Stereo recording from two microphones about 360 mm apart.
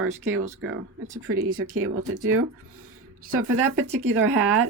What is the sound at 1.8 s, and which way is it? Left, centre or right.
Speech, right.